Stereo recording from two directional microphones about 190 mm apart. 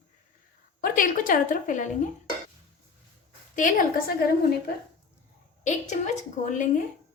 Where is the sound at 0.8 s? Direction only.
45° left (ahead or behind).